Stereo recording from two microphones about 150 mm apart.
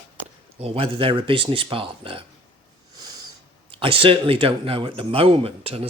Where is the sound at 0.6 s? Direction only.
40° right (ahead or behind).